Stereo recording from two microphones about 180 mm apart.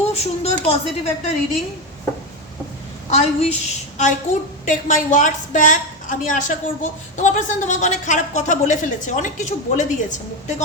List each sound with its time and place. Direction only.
0.1 s a woman's voice: 35° left (ahead or behind)
3.1 s a woman's voice: 35° left (ahead or behind)